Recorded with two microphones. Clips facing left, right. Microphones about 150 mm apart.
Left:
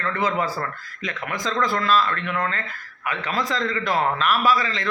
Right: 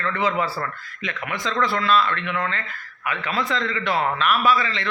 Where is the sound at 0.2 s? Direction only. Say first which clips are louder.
Right 1 dB; 40° left (ahead or behind).